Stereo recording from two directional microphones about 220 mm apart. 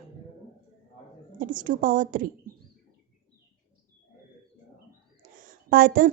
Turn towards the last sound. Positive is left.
turn(degrees=-40)  # may be behind; listen again after turning